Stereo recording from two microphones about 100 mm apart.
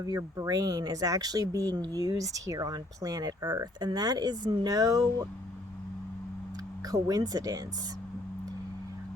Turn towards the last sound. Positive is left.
turn(degrees=-40)  # may be behind; listen again after turning